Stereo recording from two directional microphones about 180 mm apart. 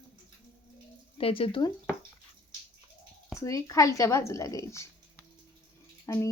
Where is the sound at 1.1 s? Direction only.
30° left (ahead or behind).